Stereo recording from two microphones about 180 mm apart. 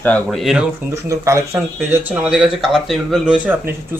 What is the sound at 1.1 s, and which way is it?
Speech, 15° right (ahead or behind).